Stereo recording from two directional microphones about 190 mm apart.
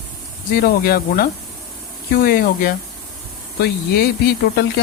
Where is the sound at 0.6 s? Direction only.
55° left (ahead or behind).